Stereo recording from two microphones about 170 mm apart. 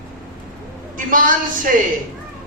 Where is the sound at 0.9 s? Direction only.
50° right (ahead or behind).